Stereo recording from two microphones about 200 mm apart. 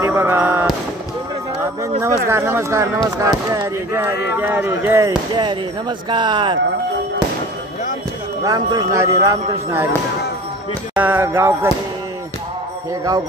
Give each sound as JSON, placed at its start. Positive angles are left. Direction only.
{"t": 0.0, "sound": "music", "side_deg": -10}
{"t": 1.6, "sound": "speech", "side_deg": -15}
{"t": 8.5, "sound": "speech", "side_deg": -20}
{"t": 11.0, "sound": "speech", "side_deg": -10}